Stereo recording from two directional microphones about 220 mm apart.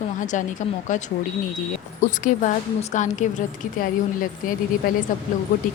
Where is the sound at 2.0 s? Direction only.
35° left (ahead or behind).